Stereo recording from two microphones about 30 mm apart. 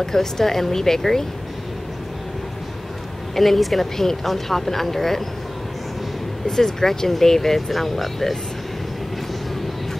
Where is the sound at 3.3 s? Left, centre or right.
Centre.